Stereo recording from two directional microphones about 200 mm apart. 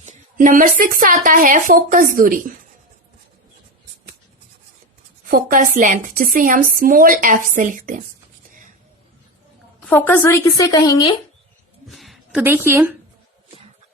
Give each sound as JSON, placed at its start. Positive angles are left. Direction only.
{"t": 0.0, "sound": "speech", "side_deg": -40}
{"t": 5.2, "sound": "speech", "side_deg": -45}
{"t": 8.4, "sound": "a sound", "side_deg": -40}
{"t": 9.8, "sound": "a woman's voice", "side_deg": 10}
{"t": 11.9, "sound": "a woman's voice", "side_deg": 0}